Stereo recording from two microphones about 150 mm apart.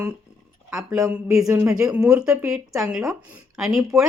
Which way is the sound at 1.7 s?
5° right (ahead or behind).